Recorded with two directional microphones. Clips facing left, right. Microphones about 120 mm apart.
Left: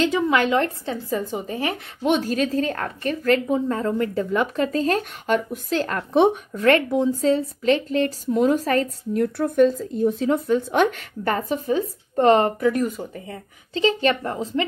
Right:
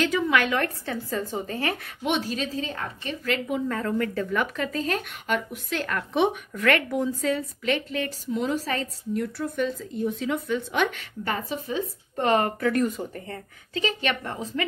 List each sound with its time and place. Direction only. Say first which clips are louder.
0.0 s a woman's voice: left 3 dB; 25° left (ahead or behind)
2.0 s a woman's voice: left 6 dB; 45° left (ahead or behind)
3.4 s speech: left 5 dB; 30° left (ahead or behind)
12.5 s speech: left 3 dB; 15° left (ahead or behind)
13.7 s speech: left 7 dB; 35° left (ahead or behind)